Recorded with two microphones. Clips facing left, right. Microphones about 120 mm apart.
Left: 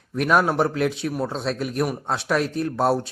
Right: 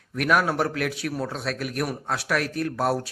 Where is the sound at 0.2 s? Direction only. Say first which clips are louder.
Left 3 dB; 25° left (ahead or behind).